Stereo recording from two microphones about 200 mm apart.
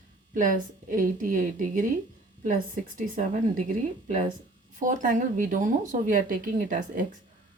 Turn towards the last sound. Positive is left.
turn(degrees=-40)  # may be behind; listen again after turning